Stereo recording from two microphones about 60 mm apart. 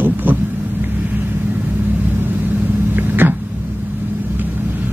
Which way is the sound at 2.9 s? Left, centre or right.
Right.